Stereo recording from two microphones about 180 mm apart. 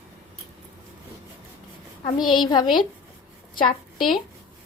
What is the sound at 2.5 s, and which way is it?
Speech, 25° left (ahead or behind).